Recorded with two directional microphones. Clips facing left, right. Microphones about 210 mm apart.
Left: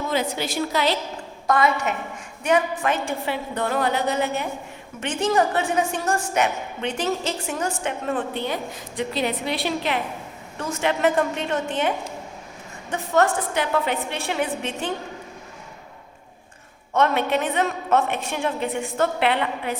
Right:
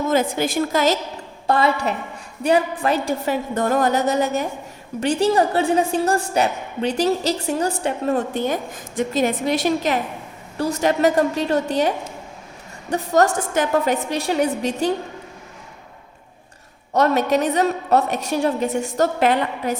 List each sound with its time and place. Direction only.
0.1 s a woman's voice: 50° right (ahead or behind)
1.5 s a woman's voice: 30° right (ahead or behind)
16.9 s a woman's voice: 40° right (ahead or behind)